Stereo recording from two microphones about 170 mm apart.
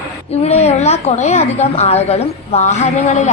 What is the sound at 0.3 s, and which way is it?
A woman's voice, 35° left (ahead or behind).